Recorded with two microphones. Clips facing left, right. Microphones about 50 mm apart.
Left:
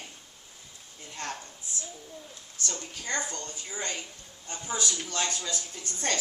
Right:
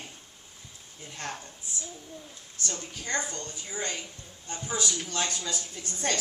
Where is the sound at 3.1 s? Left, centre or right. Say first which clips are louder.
Right 2 dB; centre.